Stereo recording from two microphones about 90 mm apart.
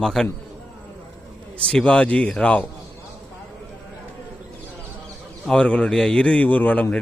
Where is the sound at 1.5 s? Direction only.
10° left (ahead or behind).